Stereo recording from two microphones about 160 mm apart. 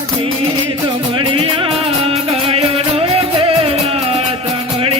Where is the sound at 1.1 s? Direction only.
35° right (ahead or behind).